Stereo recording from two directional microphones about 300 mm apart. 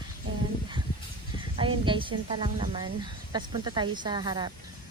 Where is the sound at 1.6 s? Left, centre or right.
Centre.